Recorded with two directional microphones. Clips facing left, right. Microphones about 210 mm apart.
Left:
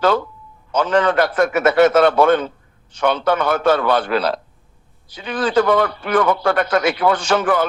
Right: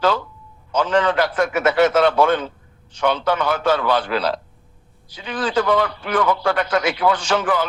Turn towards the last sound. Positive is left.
turn(degrees=50)  # may be behind; listen again after turning